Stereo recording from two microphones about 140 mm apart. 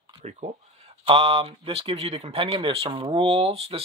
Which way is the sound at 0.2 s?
55° right (ahead or behind).